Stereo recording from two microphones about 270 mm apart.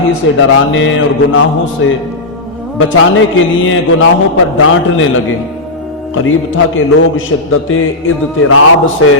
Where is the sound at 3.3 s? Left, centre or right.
Left.